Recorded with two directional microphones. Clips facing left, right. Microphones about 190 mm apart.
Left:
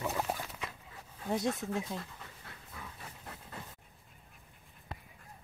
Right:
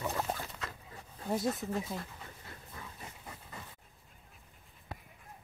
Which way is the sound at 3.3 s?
5° left (ahead or behind).